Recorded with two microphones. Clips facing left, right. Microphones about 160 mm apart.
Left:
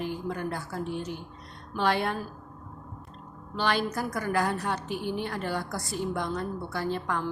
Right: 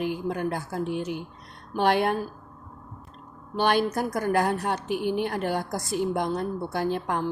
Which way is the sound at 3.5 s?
55° right (ahead or behind).